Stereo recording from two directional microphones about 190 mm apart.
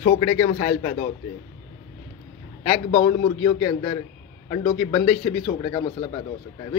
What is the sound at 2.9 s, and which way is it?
A man's voice, 20° left (ahead or behind).